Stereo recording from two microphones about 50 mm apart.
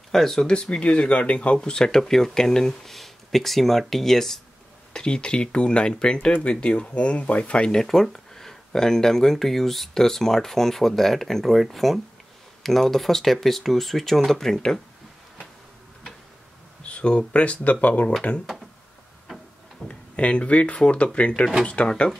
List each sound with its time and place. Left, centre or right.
0.1 s speech: centre
0.5 s speech: left
4.9 s speech: centre
16.8 s speech: left
19.9 s speech: left